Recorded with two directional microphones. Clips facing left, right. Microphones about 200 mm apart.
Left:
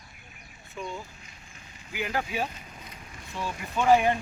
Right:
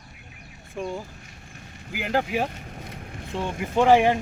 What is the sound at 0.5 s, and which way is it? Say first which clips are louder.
Speech: right 6 dB; 50° right (ahead or behind).